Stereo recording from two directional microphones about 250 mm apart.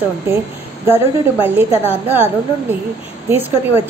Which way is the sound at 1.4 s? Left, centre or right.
Centre.